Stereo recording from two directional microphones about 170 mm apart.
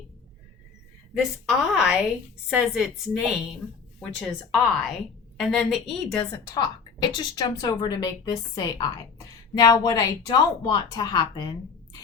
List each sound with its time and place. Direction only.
1.2 s a woman's voice: 5° right (ahead or behind)
6.5 s a woman's voice: 25° left (ahead or behind)